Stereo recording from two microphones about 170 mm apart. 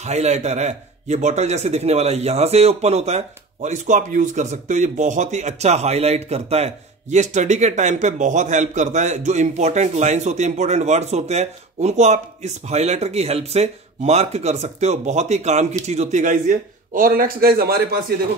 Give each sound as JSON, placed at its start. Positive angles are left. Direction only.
{"t": 0.0, "sound": "a man's voice", "side_deg": -40}